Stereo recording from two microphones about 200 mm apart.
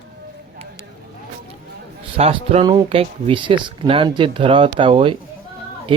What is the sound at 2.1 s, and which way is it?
Speech, 30° right (ahead or behind).